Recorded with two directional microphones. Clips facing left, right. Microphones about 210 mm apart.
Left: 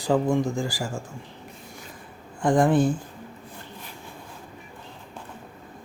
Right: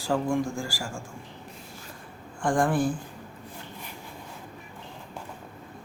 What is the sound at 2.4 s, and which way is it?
Speech, 20° left (ahead or behind).